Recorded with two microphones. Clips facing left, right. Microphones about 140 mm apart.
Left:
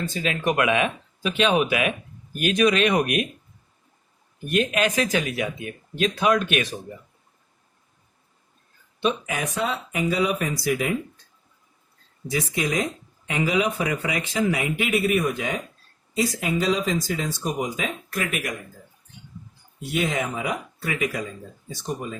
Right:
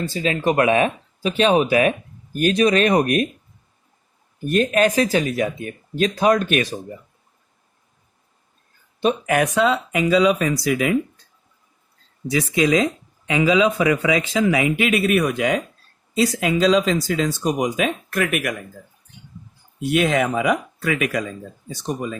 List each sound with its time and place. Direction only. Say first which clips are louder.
0.1 s speech: right 6 dB; 35° right (ahead or behind)
4.4 s speech: right 5 dB; 40° right (ahead or behind)
9.2 s speech: right 9 dB; 65° right (ahead or behind); by 10.9 s 90° right
12.3 s speech: right 7 dB; 90° right; by 18.5 s 65° right (ahead or behind)
19.8 s speech: right 7 dB; 75° right (ahead or behind)